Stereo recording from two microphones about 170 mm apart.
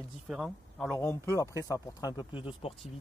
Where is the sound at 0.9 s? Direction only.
15° left (ahead or behind).